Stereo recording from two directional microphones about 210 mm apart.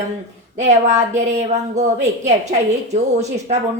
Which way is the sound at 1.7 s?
35° right (ahead or behind).